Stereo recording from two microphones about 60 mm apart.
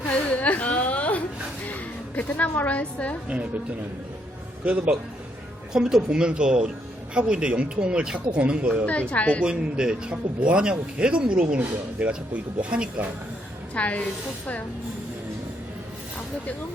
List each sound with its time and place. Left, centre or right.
0.1 s a sound: left
1.6 s a woman's voice: left
4.6 s a man's voice: right
5.7 s a man's voice: centre
8.9 s a woman's voice: left
9.4 s a man's voice: centre
13.7 s a woman's voice: left